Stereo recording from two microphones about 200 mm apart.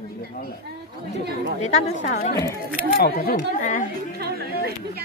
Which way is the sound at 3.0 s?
50° left (ahead or behind).